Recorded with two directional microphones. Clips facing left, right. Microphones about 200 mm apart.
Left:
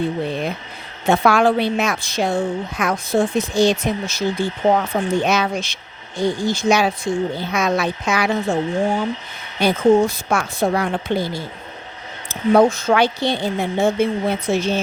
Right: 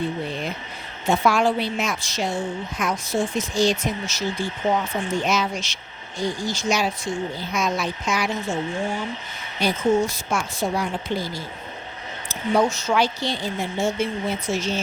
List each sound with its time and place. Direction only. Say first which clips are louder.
1.0 s a woman's voice: left 4 dB; 65° left (ahead or behind)
12.5 s a woman's voice: left 6 dB; 55° left (ahead or behind)